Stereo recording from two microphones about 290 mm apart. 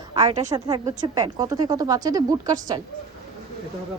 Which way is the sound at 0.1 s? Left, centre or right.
Centre.